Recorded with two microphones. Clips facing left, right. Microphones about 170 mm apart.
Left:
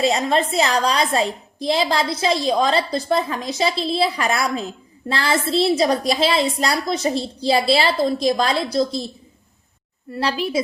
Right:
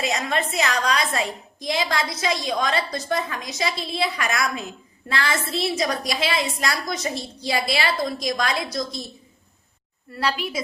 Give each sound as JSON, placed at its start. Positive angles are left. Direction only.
{"t": 0.0, "sound": "a woman's voice", "side_deg": 30}
{"t": 10.1, "sound": "a woman's voice", "side_deg": 35}